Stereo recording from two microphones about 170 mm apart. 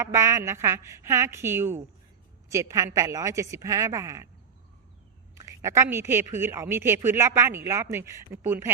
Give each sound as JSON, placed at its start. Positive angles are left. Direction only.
{"t": 0.0, "sound": "a woman's voice", "side_deg": -15}
{"t": 5.3, "sound": "a woman's voice", "side_deg": -20}